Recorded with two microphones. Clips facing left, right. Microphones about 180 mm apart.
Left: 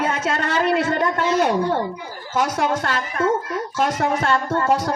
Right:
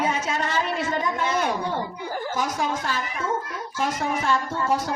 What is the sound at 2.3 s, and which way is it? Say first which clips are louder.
A woman's voice: left 8 dB; 70° left (ahead or behind).